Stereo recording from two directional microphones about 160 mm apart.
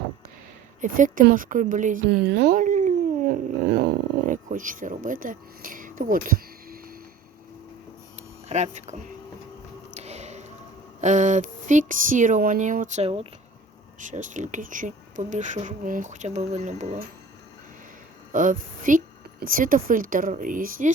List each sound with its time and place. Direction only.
0.8 s a woman's voice: 55° right (ahead or behind)
2.0 s speech: 90° right; by 3.8 s 70° right (ahead or behind)
4.3 s a woman's voice: 55° right (ahead or behind)
8.4 s speech: 45° right (ahead or behind)
9.9 s a sound: 45° right (ahead or behind)
11.0 s speech: 50° right (ahead or behind)
14.0 s speech: 50° right (ahead or behind)
18.3 s a woman's voice: 55° right (ahead or behind)